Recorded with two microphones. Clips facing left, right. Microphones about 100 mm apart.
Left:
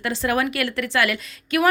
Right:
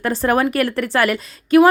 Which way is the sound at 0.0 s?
45° right (ahead or behind).